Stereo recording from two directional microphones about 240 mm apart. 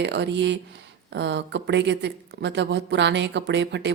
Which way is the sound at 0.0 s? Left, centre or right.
Right.